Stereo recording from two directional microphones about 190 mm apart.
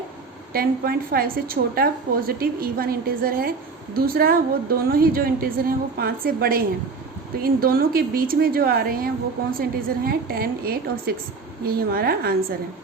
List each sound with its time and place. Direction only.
0.5 s a woman's voice: 50° right (ahead or behind)
10.1 s a woman's voice: 55° right (ahead or behind)